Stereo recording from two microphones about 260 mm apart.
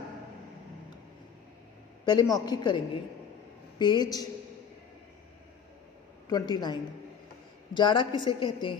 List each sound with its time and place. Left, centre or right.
2.3 s a woman's voice: centre
6.2 s a woman's voice: centre